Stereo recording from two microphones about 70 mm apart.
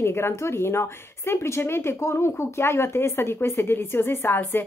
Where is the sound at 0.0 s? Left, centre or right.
Left.